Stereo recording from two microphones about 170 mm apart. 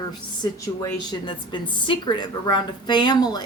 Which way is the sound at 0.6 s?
25° left (ahead or behind).